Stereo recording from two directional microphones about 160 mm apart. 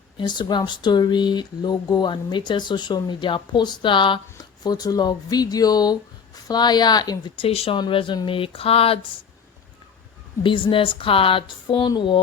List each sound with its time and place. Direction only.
0.2 s speech: 25° left (ahead or behind)
10.4 s speech: 35° left (ahead or behind)